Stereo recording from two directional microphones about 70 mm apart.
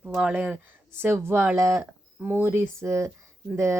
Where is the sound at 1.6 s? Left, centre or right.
Right.